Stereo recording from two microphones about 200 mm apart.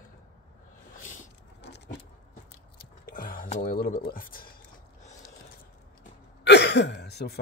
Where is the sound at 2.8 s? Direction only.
45° left (ahead or behind).